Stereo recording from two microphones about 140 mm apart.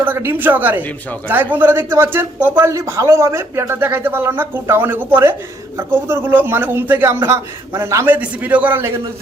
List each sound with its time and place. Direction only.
0.0 s a woman's voice: 15° right (ahead or behind)